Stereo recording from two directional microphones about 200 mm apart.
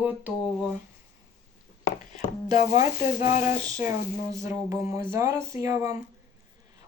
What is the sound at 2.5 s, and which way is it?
Speech, 15° right (ahead or behind).